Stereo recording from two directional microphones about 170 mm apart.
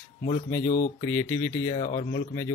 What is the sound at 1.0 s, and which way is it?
Speech, 15° left (ahead or behind).